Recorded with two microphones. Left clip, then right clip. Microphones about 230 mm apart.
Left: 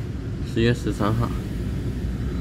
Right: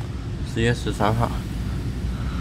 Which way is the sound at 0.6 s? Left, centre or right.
Centre.